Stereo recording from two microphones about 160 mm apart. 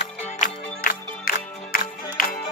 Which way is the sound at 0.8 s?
65° left (ahead or behind).